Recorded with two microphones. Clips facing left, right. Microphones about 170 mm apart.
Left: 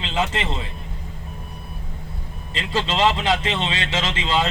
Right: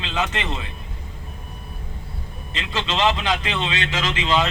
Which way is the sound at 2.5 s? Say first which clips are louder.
Left 2 dB; 35° left (ahead or behind).